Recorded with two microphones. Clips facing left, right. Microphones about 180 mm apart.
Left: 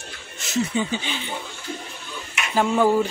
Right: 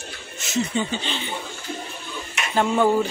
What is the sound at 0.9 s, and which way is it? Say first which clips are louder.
Speech: even; 10° left (ahead or behind).